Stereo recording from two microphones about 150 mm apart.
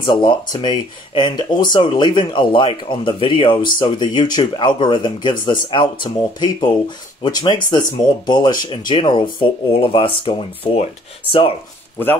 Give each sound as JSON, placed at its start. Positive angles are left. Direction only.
{"t": 0.0, "sound": "speech", "side_deg": 35}
{"t": 12.0, "sound": "speech", "side_deg": 10}